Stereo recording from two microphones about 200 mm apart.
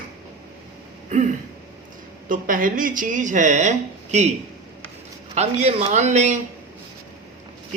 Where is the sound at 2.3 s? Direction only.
45° right (ahead or behind).